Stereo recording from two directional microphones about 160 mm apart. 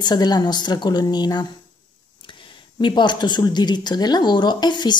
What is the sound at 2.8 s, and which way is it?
A woman's voice, 30° left (ahead or behind).